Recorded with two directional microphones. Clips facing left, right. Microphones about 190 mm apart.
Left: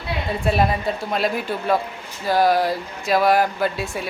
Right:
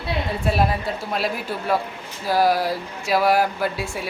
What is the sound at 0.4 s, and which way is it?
Speech, centre (ahead or behind).